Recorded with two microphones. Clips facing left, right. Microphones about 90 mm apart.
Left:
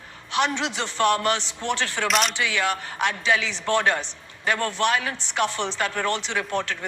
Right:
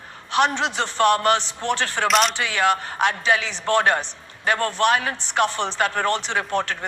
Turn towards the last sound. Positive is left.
turn(degrees=-45)  # may be behind; listen again after turning